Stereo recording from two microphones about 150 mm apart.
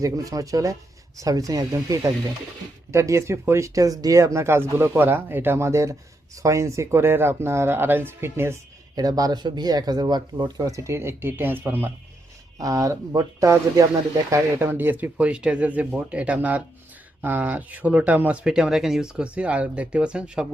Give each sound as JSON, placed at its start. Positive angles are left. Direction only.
{"t": 0.0, "sound": "speech", "side_deg": -25}